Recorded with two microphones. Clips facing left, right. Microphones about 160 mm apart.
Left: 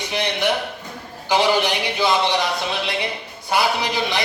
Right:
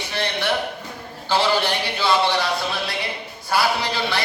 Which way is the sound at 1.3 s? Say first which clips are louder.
Left 2 dB; 15° left (ahead or behind).